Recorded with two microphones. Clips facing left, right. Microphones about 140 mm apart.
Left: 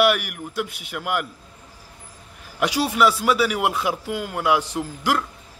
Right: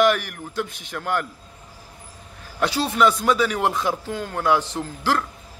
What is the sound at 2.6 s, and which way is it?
Speech, 10° left (ahead or behind).